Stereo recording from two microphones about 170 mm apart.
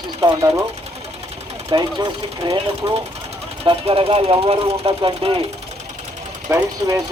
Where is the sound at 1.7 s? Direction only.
25° right (ahead or behind).